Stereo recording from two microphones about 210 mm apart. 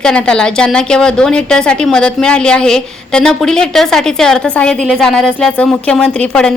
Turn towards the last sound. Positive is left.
turn(degrees=5)  # may be behind; listen again after turning